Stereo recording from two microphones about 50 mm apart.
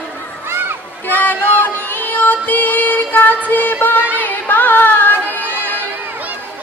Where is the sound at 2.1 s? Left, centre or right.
Left.